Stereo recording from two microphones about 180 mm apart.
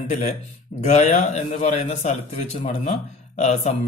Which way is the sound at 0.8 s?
40° left (ahead or behind).